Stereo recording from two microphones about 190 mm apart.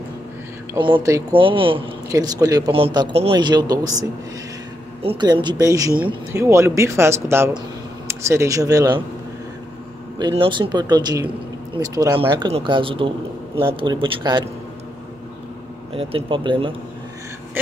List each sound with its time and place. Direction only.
0.9 s speech: 15° right (ahead or behind)
1.3 s a man's voice: 25° right (ahead or behind)
5.0 s a man's voice: 25° right (ahead or behind)
10.1 s a man's voice: 25° right (ahead or behind)
15.9 s a man's voice: 30° right (ahead or behind)